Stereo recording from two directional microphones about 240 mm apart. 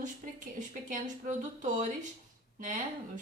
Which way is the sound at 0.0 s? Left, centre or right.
Right.